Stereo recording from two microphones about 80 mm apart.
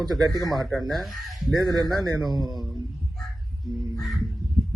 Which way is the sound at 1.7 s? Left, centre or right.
Right.